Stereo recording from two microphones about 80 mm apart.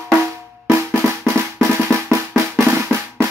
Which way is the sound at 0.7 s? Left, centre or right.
Right.